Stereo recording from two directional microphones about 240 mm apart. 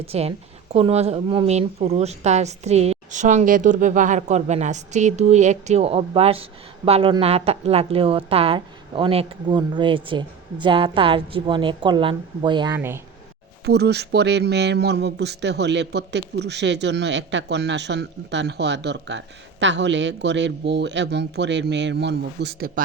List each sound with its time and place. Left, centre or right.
0.0 s speech: right
13.7 s speech: right